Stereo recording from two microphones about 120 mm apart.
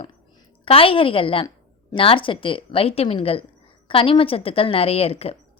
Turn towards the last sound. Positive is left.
turn(degrees=55)  # may be behind; listen again after turning